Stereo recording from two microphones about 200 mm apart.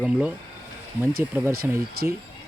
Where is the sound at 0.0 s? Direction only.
5° right (ahead or behind).